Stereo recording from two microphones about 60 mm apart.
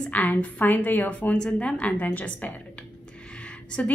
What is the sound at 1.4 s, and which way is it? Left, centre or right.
Speech, centre.